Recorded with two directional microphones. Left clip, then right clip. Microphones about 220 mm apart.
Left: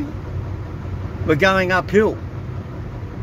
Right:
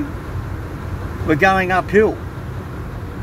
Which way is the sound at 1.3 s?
20° left (ahead or behind).